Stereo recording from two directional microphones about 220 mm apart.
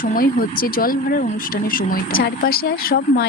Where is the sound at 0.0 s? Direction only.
40° left (ahead or behind).